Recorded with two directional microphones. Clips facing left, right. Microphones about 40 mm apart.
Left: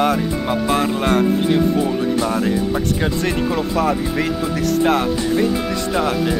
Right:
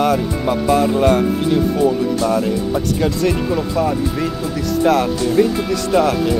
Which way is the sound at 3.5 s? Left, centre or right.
Left.